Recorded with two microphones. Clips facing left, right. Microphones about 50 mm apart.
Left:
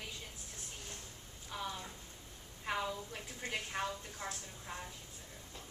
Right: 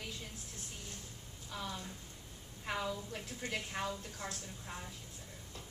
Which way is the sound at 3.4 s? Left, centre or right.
Centre.